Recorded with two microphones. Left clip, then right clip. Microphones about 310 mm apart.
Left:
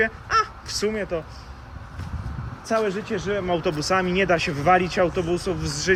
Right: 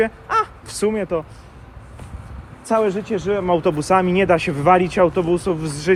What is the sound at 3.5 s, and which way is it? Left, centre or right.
Speech, right.